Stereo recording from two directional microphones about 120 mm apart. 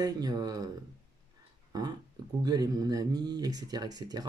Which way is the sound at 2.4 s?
35° right (ahead or behind).